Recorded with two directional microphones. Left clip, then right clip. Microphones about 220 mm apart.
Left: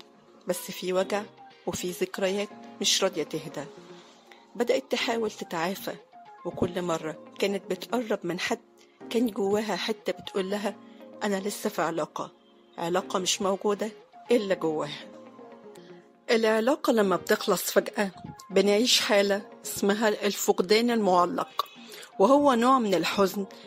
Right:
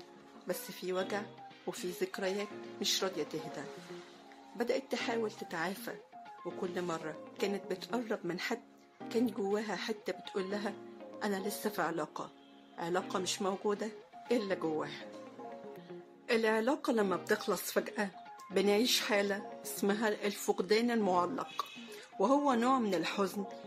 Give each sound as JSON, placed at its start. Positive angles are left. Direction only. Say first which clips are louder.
{"t": 0.5, "sound": "speech", "louder": "left 8 dB", "side_deg": 35}
{"t": 16.3, "sound": "speech", "louder": "left 8 dB", "side_deg": 35}